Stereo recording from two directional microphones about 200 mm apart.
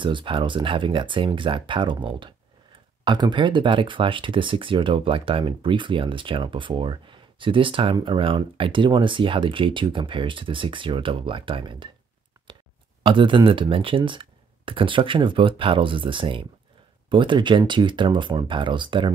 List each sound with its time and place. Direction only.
0.0 s speech: 25° right (ahead or behind)
13.0 s speech: 25° right (ahead or behind)